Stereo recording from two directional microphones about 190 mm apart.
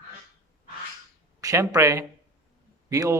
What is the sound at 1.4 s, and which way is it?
Speech, 20° right (ahead or behind).